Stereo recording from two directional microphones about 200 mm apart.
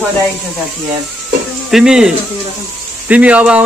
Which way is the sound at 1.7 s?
5° right (ahead or behind).